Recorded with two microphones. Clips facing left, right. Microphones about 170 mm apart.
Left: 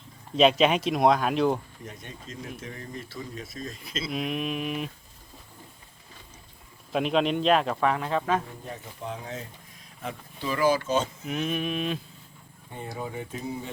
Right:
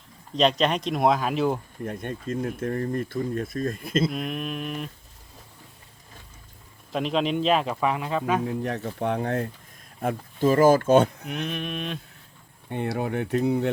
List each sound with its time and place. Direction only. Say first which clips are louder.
0.3 s speech: left 2 dB; 5° left (ahead or behind)
1.8 s speech: right 10 dB; 55° right (ahead or behind)
4.1 s speech: left 1 dB; centre (ahead or behind)
6.9 s speech: even; centre (ahead or behind)
8.4 s speech: right 12 dB; 70° right (ahead or behind)
10.0 s speech: right 11 dB; 50° right (ahead or behind)
11.3 s speech: left 2 dB; centre (ahead or behind)
12.6 s speech: right 8 dB; 70° right (ahead or behind)